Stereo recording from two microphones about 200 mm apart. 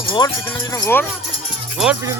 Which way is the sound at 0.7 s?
15° left (ahead or behind).